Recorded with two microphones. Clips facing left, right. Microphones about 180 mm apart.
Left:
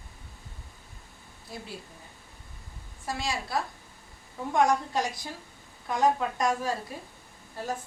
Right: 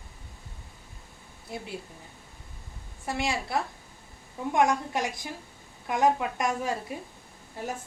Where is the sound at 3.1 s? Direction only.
25° right (ahead or behind).